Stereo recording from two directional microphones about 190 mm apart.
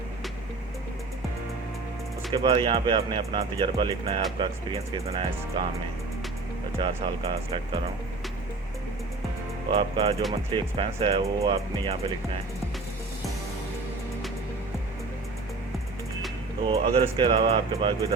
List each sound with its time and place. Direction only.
2.3 s speech: 25° right (ahead or behind)
6.7 s speech: 25° right (ahead or behind)
9.6 s speech: 25° right (ahead or behind)
16.6 s speech: 30° right (ahead or behind)